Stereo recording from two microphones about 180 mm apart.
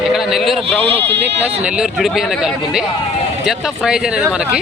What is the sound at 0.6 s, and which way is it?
Speech, 30° right (ahead or behind).